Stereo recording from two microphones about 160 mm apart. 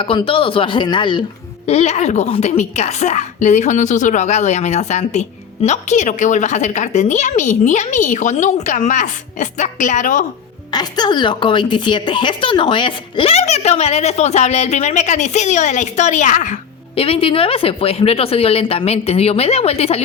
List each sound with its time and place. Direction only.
0.0 s speech: 35° left (ahead or behind)
1.6 s a woman's voice: 45° left (ahead or behind)
10.7 s speech: 25° left (ahead or behind)